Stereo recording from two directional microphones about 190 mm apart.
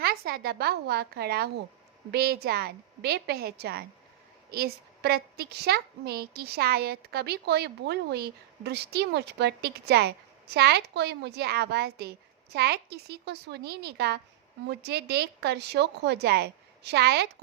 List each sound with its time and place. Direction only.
0.0 s a woman's voice: 55° right (ahead or behind)